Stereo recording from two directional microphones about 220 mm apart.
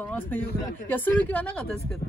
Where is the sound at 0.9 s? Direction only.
10° left (ahead or behind).